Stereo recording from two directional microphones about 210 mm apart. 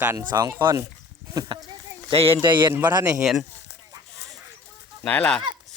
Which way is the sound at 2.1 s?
25° right (ahead or behind).